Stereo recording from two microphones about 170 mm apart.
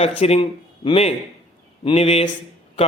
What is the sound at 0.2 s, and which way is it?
A man's voice, 35° left (ahead or behind).